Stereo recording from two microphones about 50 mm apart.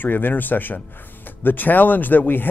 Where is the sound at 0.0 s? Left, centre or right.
Left.